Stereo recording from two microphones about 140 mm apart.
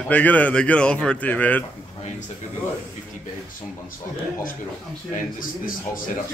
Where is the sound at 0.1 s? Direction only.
10° left (ahead or behind).